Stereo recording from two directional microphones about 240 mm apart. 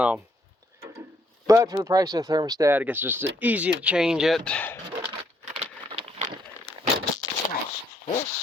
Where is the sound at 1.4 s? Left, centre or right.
Centre.